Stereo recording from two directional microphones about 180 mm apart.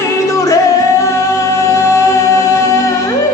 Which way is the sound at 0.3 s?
15° left (ahead or behind).